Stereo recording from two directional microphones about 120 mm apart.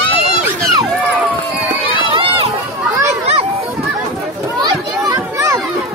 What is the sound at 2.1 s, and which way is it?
Run, 50° right (ahead or behind).